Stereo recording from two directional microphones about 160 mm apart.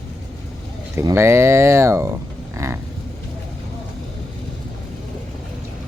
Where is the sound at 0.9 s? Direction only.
15° right (ahead or behind).